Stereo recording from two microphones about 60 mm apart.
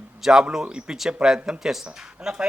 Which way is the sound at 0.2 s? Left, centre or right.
Centre.